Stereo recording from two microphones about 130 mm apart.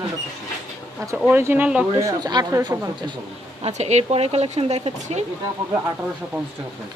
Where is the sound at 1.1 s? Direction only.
10° right (ahead or behind).